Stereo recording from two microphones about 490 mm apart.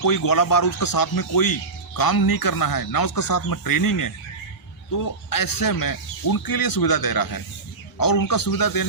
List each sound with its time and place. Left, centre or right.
0.0 s speech: left